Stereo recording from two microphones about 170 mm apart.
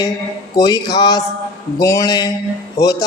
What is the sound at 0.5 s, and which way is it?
Speech, 20° left (ahead or behind).